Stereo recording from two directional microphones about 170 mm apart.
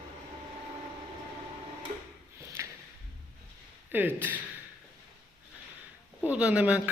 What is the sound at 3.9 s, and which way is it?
Speech, 10° right (ahead or behind).